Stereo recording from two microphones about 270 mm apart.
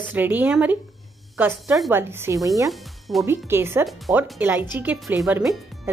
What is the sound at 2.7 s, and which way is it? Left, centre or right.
Speech, centre.